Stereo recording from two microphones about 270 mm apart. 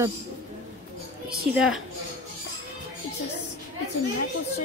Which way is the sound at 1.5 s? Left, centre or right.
Centre.